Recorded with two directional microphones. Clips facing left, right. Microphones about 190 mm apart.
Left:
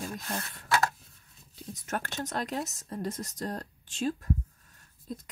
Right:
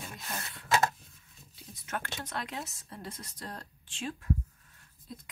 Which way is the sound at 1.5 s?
40° left (ahead or behind).